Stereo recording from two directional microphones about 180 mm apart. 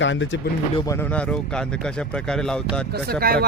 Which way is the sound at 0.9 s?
10° left (ahead or behind).